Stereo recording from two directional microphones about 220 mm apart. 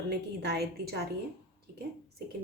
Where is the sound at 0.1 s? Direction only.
45° right (ahead or behind).